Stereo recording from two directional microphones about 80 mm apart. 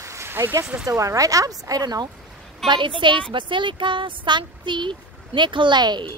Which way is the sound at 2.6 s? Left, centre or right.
Right.